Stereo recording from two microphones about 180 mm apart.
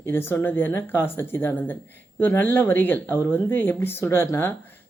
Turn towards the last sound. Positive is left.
turn(degrees=15)  # may be behind; listen again after turning